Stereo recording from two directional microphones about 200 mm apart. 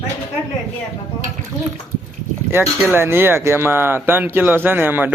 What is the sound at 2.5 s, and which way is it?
Speech, 10° right (ahead or behind).